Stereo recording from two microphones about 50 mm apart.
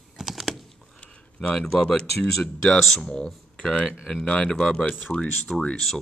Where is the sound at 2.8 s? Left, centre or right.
Centre.